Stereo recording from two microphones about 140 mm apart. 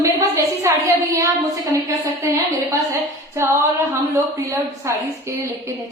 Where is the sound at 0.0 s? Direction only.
25° right (ahead or behind).